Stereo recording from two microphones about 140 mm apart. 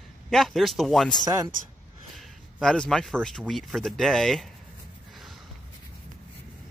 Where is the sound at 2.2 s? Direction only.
Centre (ahead or behind).